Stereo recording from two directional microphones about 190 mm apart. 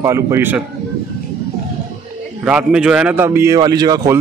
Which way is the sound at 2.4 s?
5° right (ahead or behind).